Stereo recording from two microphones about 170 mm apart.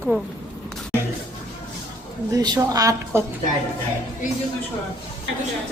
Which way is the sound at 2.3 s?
20° right (ahead or behind).